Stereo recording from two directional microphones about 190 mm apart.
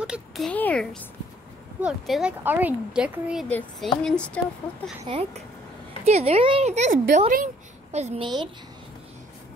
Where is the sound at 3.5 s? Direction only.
5° left (ahead or behind).